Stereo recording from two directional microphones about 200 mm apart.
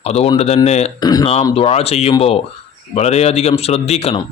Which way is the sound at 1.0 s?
20° left (ahead or behind).